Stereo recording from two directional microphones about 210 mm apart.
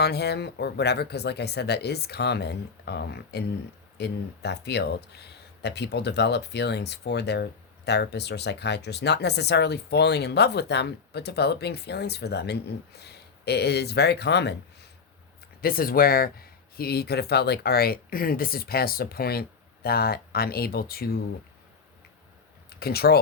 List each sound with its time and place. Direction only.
0.0 s speech: 50° left (ahead or behind)
22.7 s speech: 50° left (ahead or behind)